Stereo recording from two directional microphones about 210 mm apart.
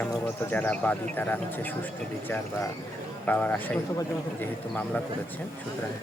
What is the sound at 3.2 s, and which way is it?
Speech, 5° left (ahead or behind).